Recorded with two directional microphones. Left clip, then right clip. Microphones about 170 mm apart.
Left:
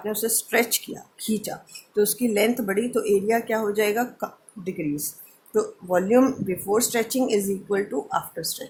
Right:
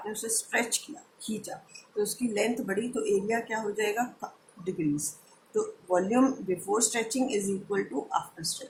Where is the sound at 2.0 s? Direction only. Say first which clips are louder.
Left 8 dB; 55° left (ahead or behind).